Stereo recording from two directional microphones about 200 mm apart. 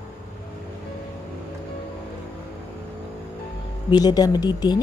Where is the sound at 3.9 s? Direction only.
20° left (ahead or behind).